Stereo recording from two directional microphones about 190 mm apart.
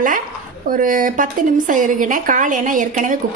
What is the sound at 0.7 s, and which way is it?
A woman's voice, 45° right (ahead or behind).